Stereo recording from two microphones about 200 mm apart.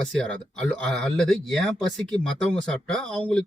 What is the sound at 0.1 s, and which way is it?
Speech, 5° left (ahead or behind).